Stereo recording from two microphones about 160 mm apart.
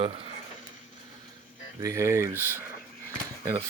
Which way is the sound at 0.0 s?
35° right (ahead or behind).